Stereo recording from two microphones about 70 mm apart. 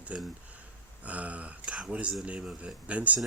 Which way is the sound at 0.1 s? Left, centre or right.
Centre.